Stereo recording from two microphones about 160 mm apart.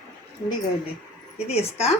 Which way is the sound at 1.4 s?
40° left (ahead or behind).